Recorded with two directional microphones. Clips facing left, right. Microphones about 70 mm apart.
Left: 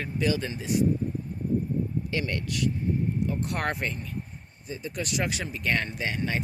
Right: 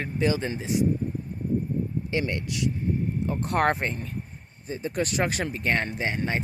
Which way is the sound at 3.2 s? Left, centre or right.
Right.